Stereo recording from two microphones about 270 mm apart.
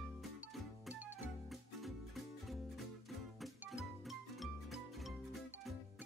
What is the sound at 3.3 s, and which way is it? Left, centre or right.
Music, centre.